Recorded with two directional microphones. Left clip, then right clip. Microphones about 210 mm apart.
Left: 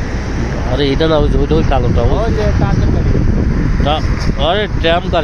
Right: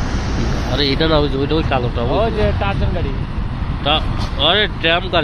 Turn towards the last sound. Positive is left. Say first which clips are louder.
# left 3 dB
turn(degrees=5)  # may be behind; listen again after turning